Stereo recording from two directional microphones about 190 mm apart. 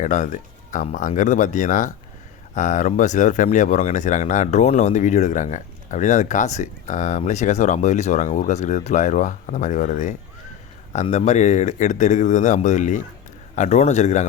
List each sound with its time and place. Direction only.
0.0 s speech: 40° left (ahead or behind)